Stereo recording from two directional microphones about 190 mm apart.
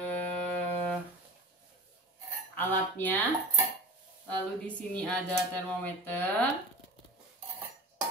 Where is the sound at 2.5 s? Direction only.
10° left (ahead or behind).